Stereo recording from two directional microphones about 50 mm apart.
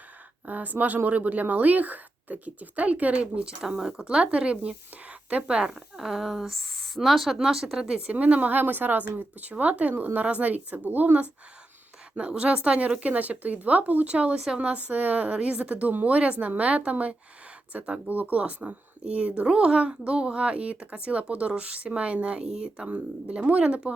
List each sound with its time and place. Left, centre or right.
0.4 s speech: right
3.4 s speech: centre
6.0 s a woman's voice: centre
8.1 s speech: right
9.5 s speech: right
9.9 s speech: right
12.1 s speech: right
16.0 s speech: right
22.4 s speech: centre
22.9 s speech: right